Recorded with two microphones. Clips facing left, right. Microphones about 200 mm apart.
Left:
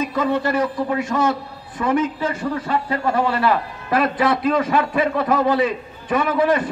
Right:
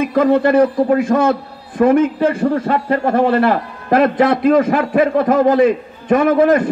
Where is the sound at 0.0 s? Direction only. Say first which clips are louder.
Right 8 dB; 55° right (ahead or behind).